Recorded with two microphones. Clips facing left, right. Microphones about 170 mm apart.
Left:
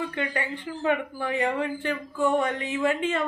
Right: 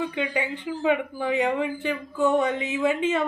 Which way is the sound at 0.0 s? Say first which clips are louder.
Right 3 dB; 15° right (ahead or behind).